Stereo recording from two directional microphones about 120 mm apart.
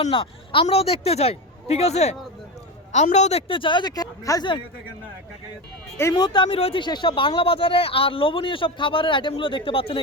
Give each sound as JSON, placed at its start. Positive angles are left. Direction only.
{"t": 0.1, "sound": "a man's voice", "side_deg": 45}
{"t": 6.0, "sound": "speech", "side_deg": 30}